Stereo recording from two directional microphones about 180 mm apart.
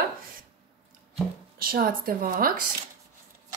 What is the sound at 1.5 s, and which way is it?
Speech, 55° right (ahead or behind).